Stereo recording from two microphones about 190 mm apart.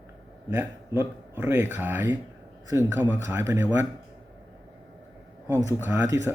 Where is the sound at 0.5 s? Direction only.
10° right (ahead or behind).